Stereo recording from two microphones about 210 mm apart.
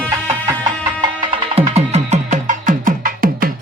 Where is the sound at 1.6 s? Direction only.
30° right (ahead or behind).